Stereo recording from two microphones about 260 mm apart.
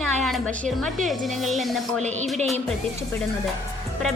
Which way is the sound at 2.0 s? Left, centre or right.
Right.